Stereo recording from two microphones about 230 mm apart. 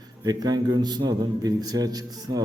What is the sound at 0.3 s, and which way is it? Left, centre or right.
A man's voice, centre.